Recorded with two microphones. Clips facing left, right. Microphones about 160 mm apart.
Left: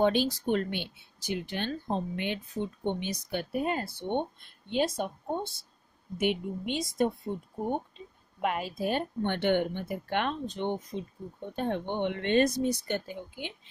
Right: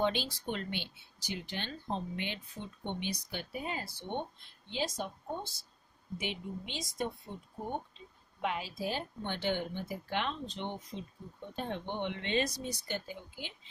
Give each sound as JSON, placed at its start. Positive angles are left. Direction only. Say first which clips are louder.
{"t": 0.0, "sound": "speech", "louder": "left 7 dB", "side_deg": 50}